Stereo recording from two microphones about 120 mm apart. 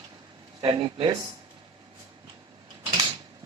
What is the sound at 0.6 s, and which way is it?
Speech, 40° right (ahead or behind).